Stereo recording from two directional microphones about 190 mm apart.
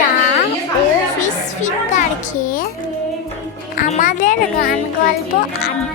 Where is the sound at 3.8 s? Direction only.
40° left (ahead or behind).